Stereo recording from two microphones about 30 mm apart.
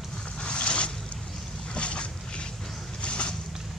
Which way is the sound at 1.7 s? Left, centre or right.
Left.